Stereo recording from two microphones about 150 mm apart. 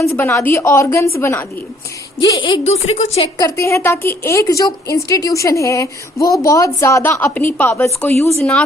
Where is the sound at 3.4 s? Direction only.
20° left (ahead or behind).